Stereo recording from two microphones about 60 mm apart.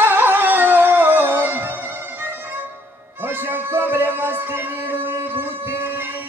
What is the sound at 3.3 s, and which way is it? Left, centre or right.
Music, right.